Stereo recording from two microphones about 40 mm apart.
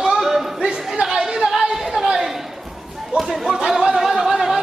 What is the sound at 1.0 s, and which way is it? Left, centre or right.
Chatter, centre.